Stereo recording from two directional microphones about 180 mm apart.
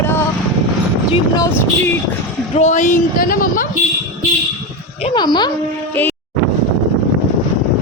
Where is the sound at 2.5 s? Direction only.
40° left (ahead or behind).